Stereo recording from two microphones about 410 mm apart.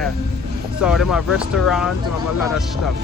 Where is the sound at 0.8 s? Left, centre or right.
Centre.